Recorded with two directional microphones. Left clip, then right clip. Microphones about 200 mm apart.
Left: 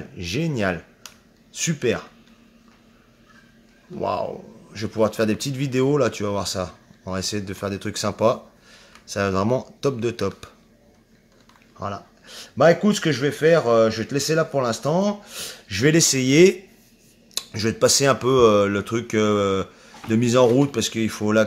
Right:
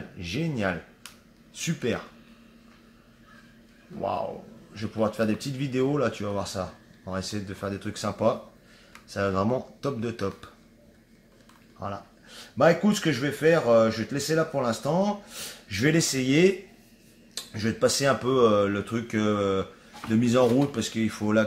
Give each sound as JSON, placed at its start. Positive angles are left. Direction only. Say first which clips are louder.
{"t": 0.2, "sound": "speech", "louder": "left 5 dB", "side_deg": 50}
{"t": 4.0, "sound": "speech", "louder": "left 5 dB", "side_deg": 50}
{"t": 11.8, "sound": "speech", "louder": "left 5 dB", "side_deg": 50}